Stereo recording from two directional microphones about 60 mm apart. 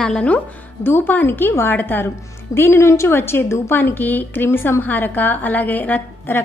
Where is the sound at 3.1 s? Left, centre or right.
Left.